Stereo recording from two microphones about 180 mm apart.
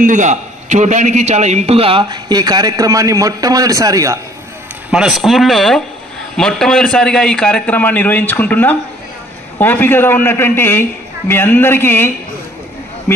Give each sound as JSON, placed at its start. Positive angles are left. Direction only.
{"t": 0.0, "sound": "a man's voice", "side_deg": -45}
{"t": 4.9, "sound": "a man's voice", "side_deg": 0}